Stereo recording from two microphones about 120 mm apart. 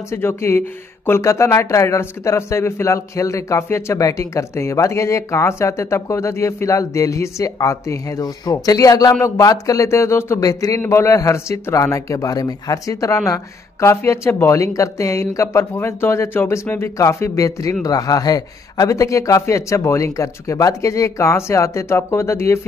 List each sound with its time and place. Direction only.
0.1 s speech: 20° left (ahead or behind)